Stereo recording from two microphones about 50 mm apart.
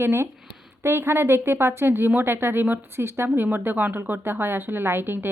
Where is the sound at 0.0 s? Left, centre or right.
Right.